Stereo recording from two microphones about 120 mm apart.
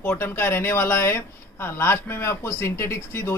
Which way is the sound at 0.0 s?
20° left (ahead or behind).